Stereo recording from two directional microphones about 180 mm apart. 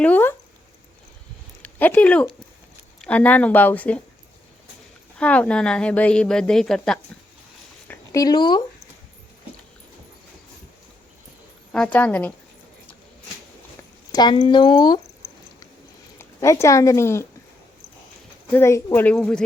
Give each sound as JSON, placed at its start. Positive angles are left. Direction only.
{"t": 0.0, "sound": "a sound", "side_deg": 10}
{"t": 1.6, "sound": "speech", "side_deg": 10}
{"t": 5.1, "sound": "a woman's voice", "side_deg": 5}
{"t": 7.9, "sound": "a sound", "side_deg": 20}
{"t": 11.7, "sound": "speech", "side_deg": 5}
{"t": 14.1, "sound": "speech", "side_deg": 25}
{"t": 16.1, "sound": "a woman's voice", "side_deg": 15}
{"t": 18.5, "sound": "speech", "side_deg": 15}